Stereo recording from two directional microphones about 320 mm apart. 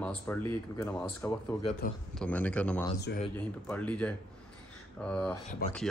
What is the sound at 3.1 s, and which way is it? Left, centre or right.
Speech, left.